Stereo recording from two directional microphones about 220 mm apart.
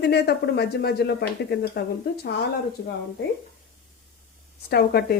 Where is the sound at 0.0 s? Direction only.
50° left (ahead or behind).